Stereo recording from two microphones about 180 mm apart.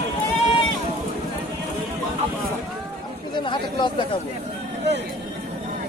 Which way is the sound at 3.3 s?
25° left (ahead or behind).